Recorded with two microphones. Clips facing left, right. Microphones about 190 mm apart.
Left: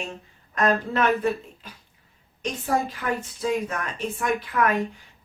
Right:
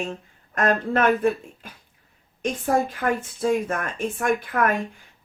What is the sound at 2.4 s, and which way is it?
Speech, 50° right (ahead or behind).